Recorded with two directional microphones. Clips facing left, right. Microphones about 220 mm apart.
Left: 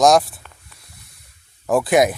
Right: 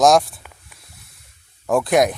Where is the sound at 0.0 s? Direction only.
Centre (ahead or behind).